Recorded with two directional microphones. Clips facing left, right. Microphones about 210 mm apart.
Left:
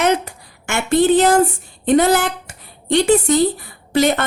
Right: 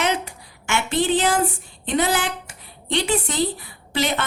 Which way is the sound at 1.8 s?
45° left (ahead or behind).